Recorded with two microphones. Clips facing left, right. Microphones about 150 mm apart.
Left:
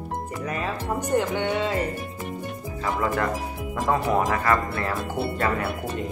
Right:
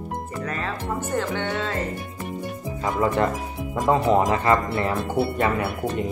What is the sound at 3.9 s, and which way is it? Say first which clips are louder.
Speech: right 4 dB; 20° right (ahead or behind).